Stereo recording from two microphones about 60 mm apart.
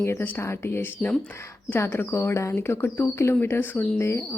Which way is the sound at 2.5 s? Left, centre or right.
Left.